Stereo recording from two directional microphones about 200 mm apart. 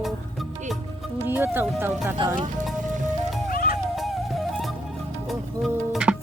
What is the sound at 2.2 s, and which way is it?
Speech, 25° right (ahead or behind).